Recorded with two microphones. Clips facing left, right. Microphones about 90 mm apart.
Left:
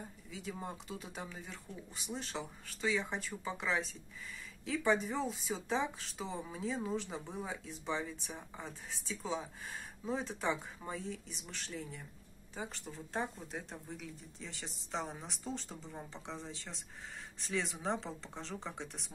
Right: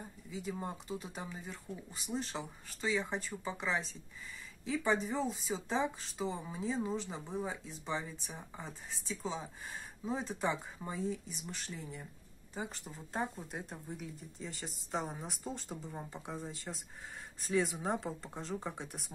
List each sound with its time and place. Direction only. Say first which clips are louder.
0.3 s speech: right 3 dB; centre (ahead or behind)